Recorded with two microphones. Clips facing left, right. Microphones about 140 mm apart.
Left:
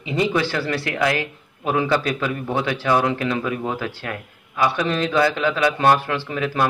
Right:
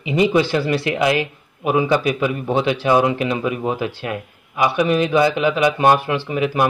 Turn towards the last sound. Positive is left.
turn(degrees=-15)  # may be behind; listen again after turning